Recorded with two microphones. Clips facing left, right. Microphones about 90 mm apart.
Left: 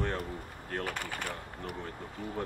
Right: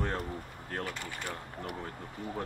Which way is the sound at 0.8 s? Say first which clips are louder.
Left 3 dB; 55° left (ahead or behind).